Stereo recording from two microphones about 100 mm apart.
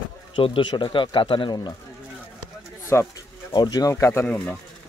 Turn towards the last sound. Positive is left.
turn(degrees=15)  # may be behind; listen again after turning